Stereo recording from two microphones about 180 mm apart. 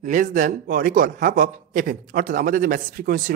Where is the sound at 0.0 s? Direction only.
45° right (ahead or behind).